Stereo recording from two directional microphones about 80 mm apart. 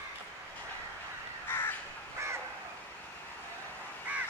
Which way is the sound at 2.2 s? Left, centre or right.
Right.